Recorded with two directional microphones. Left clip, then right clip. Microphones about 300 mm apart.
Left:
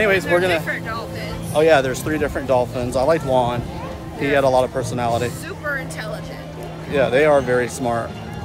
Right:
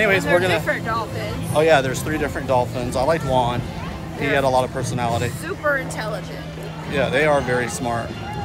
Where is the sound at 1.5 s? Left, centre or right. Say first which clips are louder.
Left 1 dB; centre.